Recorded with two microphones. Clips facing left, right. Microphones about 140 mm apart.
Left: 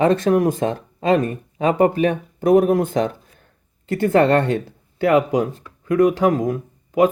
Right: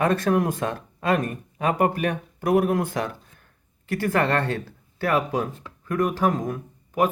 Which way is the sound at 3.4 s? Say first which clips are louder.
Left 5 dB; 25° left (ahead or behind).